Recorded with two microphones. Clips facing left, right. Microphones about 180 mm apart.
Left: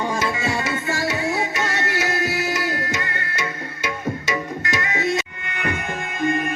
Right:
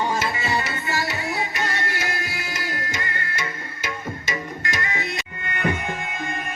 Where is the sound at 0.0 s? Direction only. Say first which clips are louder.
Left 1 dB; 75° left (ahead or behind).